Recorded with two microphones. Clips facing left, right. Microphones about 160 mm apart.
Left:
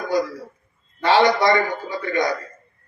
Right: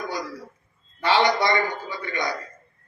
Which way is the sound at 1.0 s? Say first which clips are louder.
Left 4 dB; 45° left (ahead or behind).